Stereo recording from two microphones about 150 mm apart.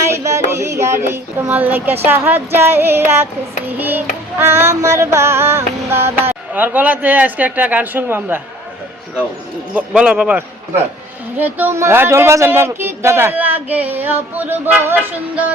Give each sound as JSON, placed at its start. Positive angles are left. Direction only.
{"t": 0.1, "sound": "speech", "side_deg": -20}
{"t": 9.7, "sound": "speech", "side_deg": -5}